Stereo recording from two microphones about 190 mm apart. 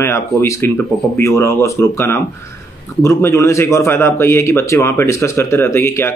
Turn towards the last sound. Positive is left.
turn(degrees=15)  # may be behind; listen again after turning